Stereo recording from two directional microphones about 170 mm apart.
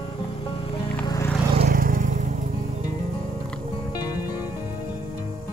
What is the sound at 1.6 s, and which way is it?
Vehicle, 55° right (ahead or behind).